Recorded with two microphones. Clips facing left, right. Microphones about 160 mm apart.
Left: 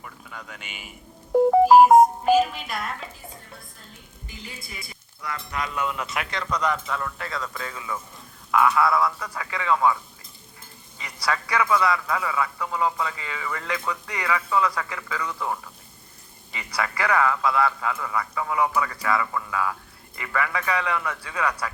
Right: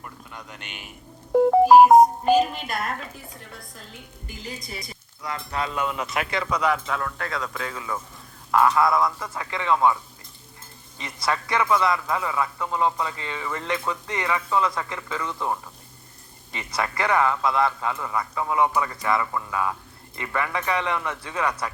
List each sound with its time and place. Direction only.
0.6 s speech: 5° left (ahead or behind)
1.9 s music: 5° left (ahead or behind)
2.5 s speech: 45° right (ahead or behind)
4.7 s a man's voice: 35° right (ahead or behind)
6.3 s speech: 5° right (ahead or behind)
6.9 s a man's voice: 50° right (ahead or behind); by 10.0 s 25° right (ahead or behind)
11.0 s a man's voice: 25° right (ahead or behind)